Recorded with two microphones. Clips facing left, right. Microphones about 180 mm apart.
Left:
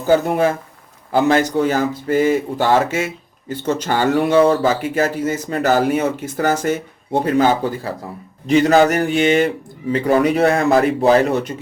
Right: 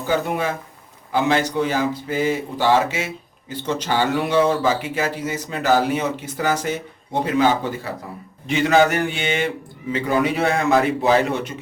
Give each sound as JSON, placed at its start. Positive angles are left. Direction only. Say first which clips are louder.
{"t": 0.1, "sound": "a man's voice", "louder": "left 7 dB", "side_deg": 40}